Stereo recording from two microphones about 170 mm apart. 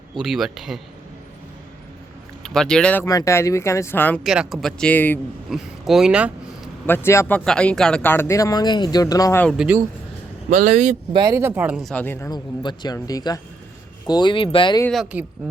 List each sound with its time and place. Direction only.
0.2 s speech: centre (ahead or behind)
2.4 s speech: 5° left (ahead or behind)
3.1 s speech: 20° left (ahead or behind)
4.2 s speech: centre (ahead or behind)
5.5 s speech: centre (ahead or behind)
6.8 s speech: 15° left (ahead or behind)
9.4 s speech: centre (ahead or behind)
11.1 s speech: 20° right (ahead or behind)
11.9 s speech: 10° left (ahead or behind)
12.3 s speech: 25° left (ahead or behind)
15.1 s speech: 10° right (ahead or behind)